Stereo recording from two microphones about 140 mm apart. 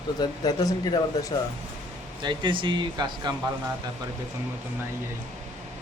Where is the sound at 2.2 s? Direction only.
35° right (ahead or behind).